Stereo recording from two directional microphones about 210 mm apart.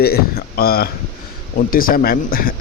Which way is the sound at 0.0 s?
45° left (ahead or behind).